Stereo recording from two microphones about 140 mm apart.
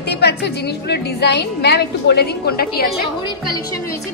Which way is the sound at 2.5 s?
90° left.